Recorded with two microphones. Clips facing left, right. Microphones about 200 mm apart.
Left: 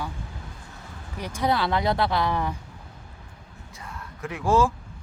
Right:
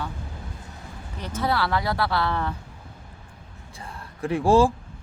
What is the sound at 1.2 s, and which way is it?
Speech, 15° left (ahead or behind).